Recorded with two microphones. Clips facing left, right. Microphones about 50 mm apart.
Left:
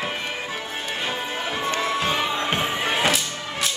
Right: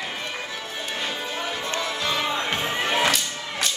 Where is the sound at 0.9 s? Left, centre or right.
Left.